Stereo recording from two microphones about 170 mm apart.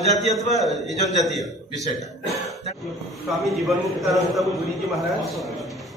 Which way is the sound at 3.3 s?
Centre (ahead or behind).